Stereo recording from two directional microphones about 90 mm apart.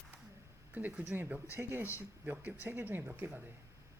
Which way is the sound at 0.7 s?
20° right (ahead or behind).